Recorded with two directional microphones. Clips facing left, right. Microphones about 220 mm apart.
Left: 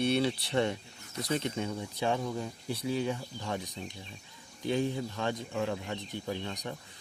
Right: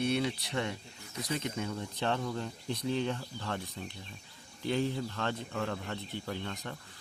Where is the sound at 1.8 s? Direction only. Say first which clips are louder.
Left 2 dB; 10° left (ahead or behind).